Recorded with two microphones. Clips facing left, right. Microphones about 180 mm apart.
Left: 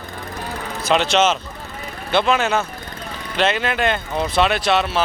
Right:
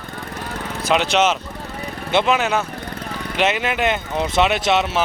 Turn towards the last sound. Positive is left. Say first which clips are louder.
# even
turn(degrees=-20)  # may be behind; listen again after turning